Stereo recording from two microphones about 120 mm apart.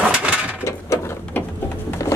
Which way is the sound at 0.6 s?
20° left (ahead or behind).